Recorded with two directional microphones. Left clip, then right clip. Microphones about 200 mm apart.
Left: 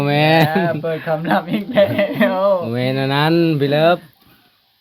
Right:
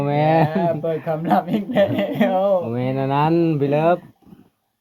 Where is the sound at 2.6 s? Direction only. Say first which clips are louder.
Left 3 dB; 35° left (ahead or behind).